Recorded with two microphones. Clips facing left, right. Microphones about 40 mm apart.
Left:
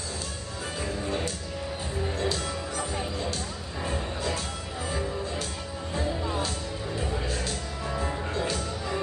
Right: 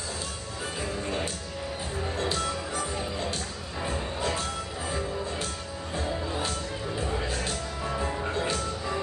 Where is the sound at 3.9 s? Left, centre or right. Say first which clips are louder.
Right 1 dB; right.